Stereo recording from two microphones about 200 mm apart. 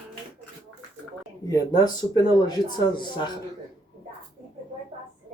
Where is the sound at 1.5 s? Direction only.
20° left (ahead or behind).